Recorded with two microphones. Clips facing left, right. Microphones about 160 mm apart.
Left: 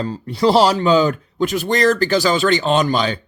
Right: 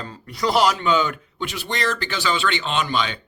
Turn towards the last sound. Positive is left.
turn(degrees=40)  # may be behind; listen again after turning